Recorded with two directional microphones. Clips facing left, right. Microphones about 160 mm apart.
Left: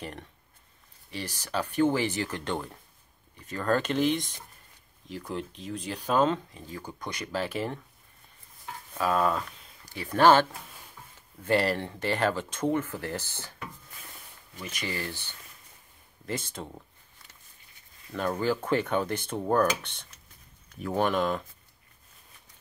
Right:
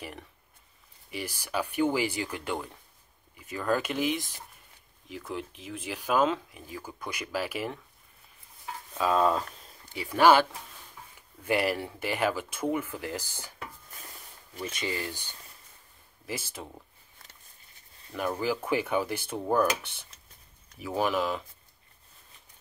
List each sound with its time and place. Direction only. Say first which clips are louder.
1.1 s speech: even; 10° right (ahead or behind)
8.9 s speech: right 1 dB; 20° right (ahead or behind)
10.0 s speech: left 1 dB; 10° right (ahead or behind)
11.4 s speech: left 2 dB; 10° right (ahead or behind)
14.6 s speech: right 2 dB; 20° right (ahead or behind); by 16.7 s 5° right (ahead or behind)
18.1 s speech: left 2 dB; 10° right (ahead or behind)